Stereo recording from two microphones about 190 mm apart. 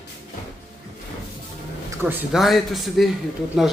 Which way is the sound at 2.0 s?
10° right (ahead or behind).